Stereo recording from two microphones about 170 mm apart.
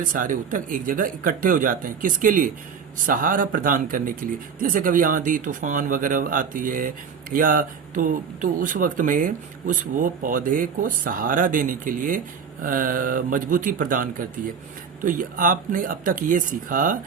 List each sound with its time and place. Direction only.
0.0 s speech: 50° right (ahead or behind)